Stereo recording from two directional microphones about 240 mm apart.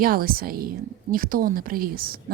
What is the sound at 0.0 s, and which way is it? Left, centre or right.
A woman's voice, right.